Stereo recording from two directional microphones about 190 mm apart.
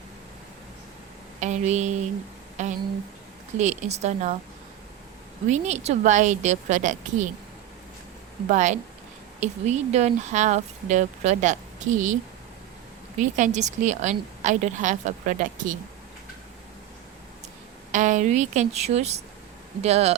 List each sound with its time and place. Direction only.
1.4 s speech: 40° right (ahead or behind)
5.5 s speech: 35° right (ahead or behind)
8.4 s speech: 40° right (ahead or behind)
17.9 s speech: 40° right (ahead or behind)